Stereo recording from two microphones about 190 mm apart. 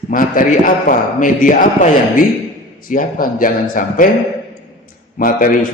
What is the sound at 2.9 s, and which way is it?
A man's voice, 45° left (ahead or behind).